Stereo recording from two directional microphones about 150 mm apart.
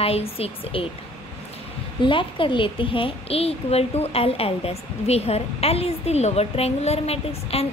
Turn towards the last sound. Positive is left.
turn(degrees=45)  # may be behind; listen again after turning